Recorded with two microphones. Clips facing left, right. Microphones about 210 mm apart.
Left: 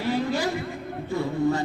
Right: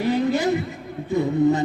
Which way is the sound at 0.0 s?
20° right (ahead or behind).